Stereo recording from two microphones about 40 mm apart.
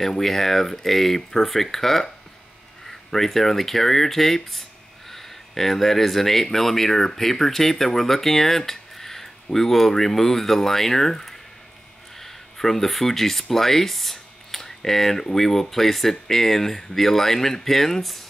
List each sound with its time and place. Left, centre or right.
0.0 s speech: centre